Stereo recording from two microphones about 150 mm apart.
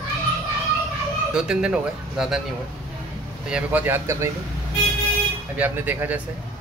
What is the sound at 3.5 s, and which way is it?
Speech, 10° right (ahead or behind).